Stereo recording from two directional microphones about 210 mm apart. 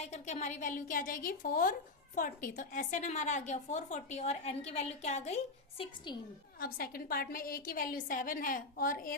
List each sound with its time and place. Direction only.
0.0 s a woman's voice: 35° left (ahead or behind)
6.6 s a woman's voice: 45° left (ahead or behind)